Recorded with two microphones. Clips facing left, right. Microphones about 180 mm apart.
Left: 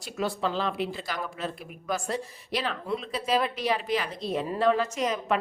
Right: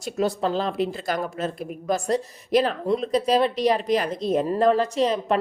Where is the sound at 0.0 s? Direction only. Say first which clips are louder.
Right 6 dB; 40° right (ahead or behind).